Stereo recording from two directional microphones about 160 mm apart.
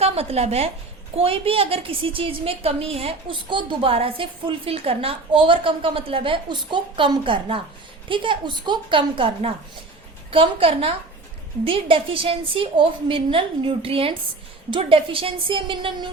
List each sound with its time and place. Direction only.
0.0 s a woman's voice: 40° right (ahead or behind)